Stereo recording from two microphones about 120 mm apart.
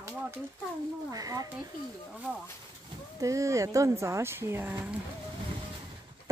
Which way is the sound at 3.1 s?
25° right (ahead or behind).